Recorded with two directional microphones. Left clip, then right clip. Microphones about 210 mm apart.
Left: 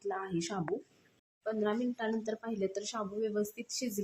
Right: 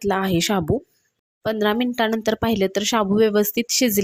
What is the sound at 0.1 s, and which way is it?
Speech, 45° right (ahead or behind).